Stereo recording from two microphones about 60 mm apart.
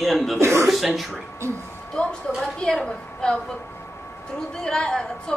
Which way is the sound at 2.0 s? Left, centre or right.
Centre.